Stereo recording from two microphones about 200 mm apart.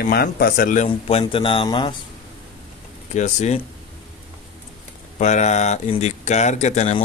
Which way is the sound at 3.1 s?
35° left (ahead or behind).